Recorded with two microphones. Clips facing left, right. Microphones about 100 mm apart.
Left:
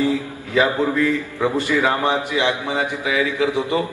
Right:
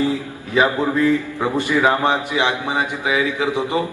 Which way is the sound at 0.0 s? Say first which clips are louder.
Even; 20° right (ahead or behind).